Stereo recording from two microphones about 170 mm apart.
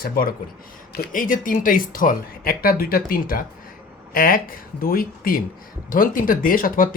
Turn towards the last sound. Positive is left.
turn(degrees=55)  # may be behind; listen again after turning